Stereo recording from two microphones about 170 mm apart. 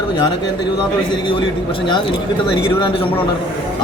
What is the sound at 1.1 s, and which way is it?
A man's voice, 30° left (ahead or behind).